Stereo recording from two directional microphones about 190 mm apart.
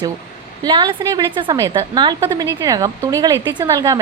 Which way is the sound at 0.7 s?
25° right (ahead or behind).